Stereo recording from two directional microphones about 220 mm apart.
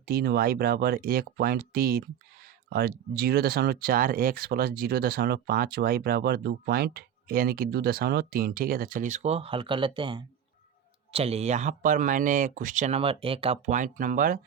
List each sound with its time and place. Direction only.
0.0 s speech: 45° right (ahead or behind)